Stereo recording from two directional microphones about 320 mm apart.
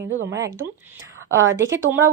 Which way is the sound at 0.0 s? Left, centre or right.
Right.